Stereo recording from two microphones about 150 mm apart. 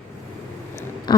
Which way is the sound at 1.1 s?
30° left (ahead or behind).